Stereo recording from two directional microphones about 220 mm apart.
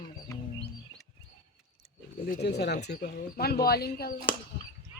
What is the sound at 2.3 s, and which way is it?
Speech, 50° left (ahead or behind).